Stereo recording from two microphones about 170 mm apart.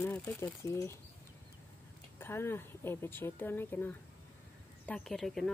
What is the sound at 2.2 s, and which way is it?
A woman's voice, 15° left (ahead or behind).